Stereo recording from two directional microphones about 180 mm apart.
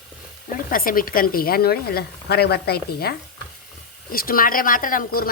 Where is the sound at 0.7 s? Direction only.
50° left (ahead or behind).